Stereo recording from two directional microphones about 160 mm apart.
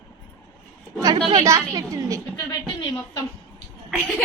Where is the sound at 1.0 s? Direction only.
30° right (ahead or behind).